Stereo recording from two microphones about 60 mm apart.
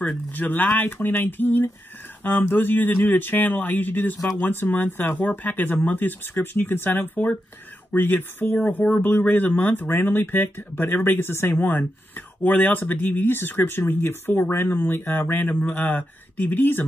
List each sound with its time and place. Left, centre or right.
0.1 s speech: left